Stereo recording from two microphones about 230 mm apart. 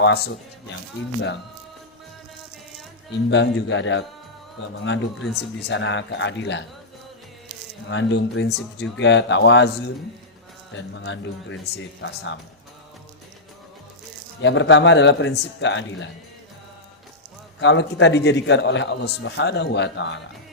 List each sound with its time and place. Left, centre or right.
0.0 s a man's voice: left
3.2 s a man's voice: left
7.9 s a man's voice: left
14.4 s a man's voice: left
17.6 s a man's voice: left